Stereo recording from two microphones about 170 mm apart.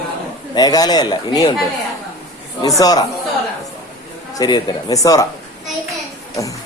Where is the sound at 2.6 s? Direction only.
20° left (ahead or behind).